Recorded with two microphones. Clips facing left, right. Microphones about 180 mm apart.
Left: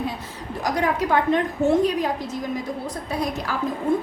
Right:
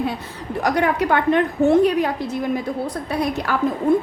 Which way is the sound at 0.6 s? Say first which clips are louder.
Right 3 dB; 65° right (ahead or behind).